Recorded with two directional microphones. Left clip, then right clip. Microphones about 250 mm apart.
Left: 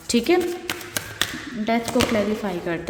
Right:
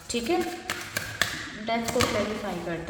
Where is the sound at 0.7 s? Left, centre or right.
Left.